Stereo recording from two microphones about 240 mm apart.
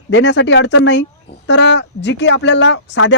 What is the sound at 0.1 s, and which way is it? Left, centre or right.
Speech, left.